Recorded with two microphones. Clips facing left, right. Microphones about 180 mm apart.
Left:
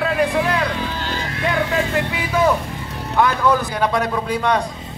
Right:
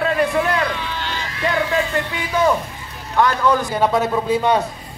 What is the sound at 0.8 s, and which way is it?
Sheep, 40° left (ahead or behind).